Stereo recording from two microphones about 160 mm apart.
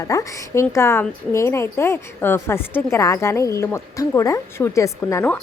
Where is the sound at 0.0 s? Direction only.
20° left (ahead or behind).